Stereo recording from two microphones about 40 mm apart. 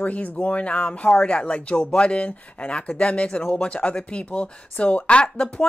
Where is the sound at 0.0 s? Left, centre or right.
Left.